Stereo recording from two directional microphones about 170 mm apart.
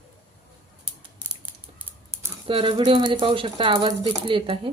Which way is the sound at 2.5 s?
30° right (ahead or behind).